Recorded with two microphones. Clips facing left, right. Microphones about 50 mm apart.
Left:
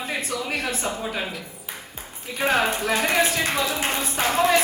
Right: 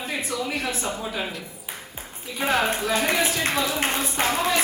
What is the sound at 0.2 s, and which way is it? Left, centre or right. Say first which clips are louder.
Speech: even; left.